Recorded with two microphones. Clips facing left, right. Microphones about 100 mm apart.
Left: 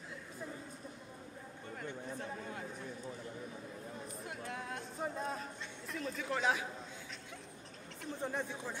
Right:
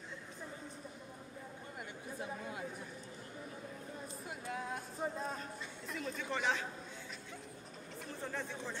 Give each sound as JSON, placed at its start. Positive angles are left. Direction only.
{"t": 1.8, "sound": "a sound", "side_deg": -10}
{"t": 4.5, "sound": "speech", "side_deg": 0}
{"t": 8.2, "sound": "speech", "side_deg": 15}